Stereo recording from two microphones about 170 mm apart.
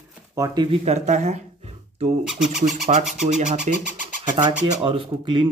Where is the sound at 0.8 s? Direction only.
40° right (ahead or behind).